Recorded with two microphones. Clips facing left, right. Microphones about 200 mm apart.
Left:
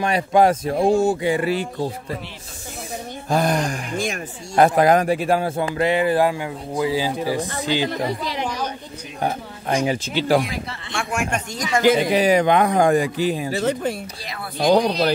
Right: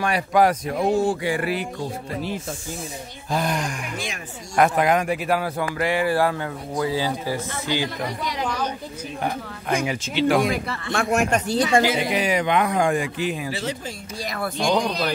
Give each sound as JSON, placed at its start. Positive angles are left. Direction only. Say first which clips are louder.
{"t": 0.0, "sound": "a man's voice", "louder": "left 2 dB", "side_deg": 25}
{"t": 3.3, "sound": "a man's voice", "louder": "left 5 dB", "side_deg": 45}
{"t": 10.5, "sound": "a man's voice", "louder": "right 4 dB", "side_deg": -55}
{"t": 11.0, "sound": "speech", "louder": "right 4 dB", "side_deg": -40}
{"t": 12.1, "sound": "speech", "louder": "left 5 dB", "side_deg": 40}
{"t": 14.6, "sound": "speech", "louder": "left 6 dB", "side_deg": 40}